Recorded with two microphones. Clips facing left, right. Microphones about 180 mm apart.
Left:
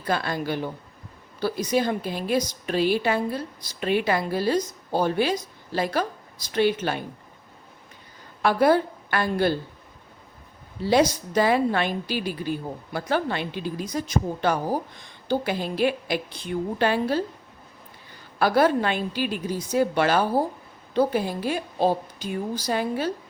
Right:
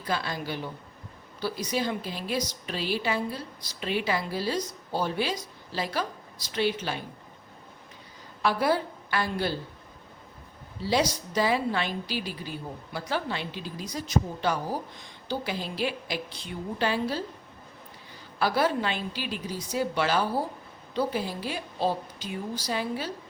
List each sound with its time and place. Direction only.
0.0 s a woman's voice: 55° left (ahead or behind)
8.4 s a woman's voice: 55° left (ahead or behind)
10.8 s a woman's voice: 55° left (ahead or behind)
18.3 s a woman's voice: 50° left (ahead or behind)